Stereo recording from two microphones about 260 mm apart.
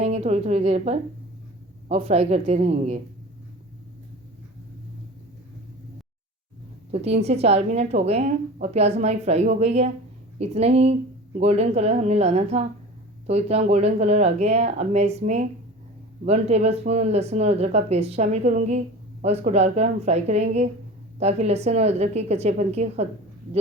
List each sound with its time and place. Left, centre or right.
0.0 s a woman's voice: right
6.9 s a woman's voice: right